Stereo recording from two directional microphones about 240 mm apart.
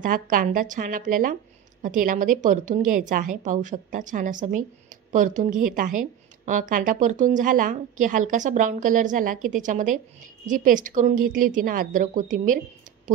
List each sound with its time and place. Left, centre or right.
0.0 s a woman's voice: right